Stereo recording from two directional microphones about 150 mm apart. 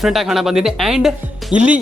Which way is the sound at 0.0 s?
Centre (ahead or behind).